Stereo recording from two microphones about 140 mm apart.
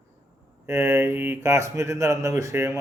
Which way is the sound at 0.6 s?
20° right (ahead or behind).